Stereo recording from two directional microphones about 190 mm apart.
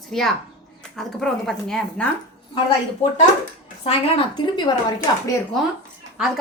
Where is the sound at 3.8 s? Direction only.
25° left (ahead or behind).